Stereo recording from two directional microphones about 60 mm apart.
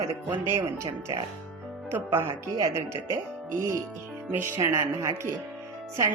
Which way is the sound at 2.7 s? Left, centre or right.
Right.